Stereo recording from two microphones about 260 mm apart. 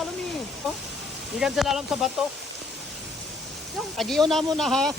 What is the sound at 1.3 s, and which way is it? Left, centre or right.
Speech, centre.